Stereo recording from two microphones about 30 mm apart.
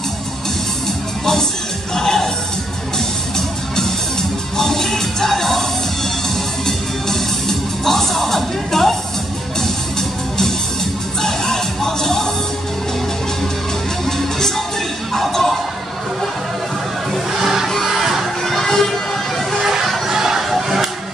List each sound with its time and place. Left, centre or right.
2.0 s music: centre
3.3 s music: centre
11.2 s music: centre
14.0 s music: centre
17.3 s music: centre
17.8 s crowd: centre
18.4 s a sound: centre
19.6 s music: centre
20.1 s a sound: centre